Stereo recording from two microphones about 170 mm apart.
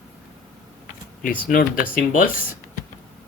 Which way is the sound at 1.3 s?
55° left (ahead or behind).